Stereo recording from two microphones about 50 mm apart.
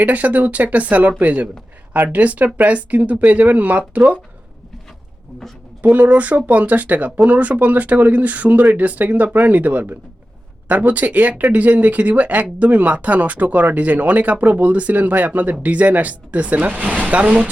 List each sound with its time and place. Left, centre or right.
0.0 s speech: right
5.8 s speech: right